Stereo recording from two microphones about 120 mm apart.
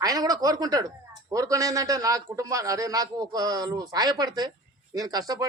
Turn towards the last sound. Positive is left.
turn(degrees=-30)  # may be behind; listen again after turning